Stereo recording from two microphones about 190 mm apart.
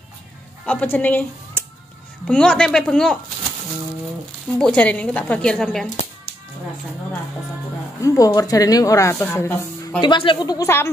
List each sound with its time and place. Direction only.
0.7 s speech: 10° left (ahead or behind)
4.6 s speech: 5° left (ahead or behind)
8.0 s speech: 15° left (ahead or behind)
9.9 s speech: 25° left (ahead or behind)